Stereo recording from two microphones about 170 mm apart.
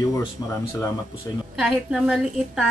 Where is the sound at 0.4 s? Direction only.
20° left (ahead or behind).